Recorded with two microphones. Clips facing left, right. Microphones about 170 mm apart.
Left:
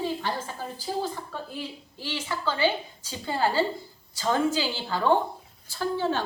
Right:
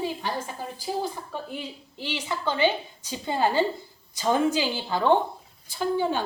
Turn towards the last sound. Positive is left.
turn(degrees=-15)  # may be behind; listen again after turning